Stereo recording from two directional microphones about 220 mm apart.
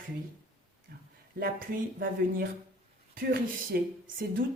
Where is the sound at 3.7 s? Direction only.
40° right (ahead or behind).